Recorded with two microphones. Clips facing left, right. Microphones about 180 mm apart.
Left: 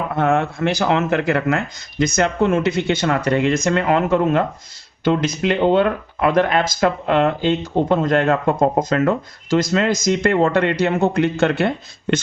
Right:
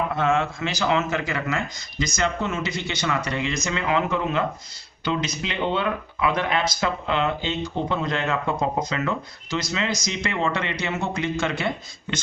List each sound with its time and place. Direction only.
0.2 s speech: 60° left (ahead or behind)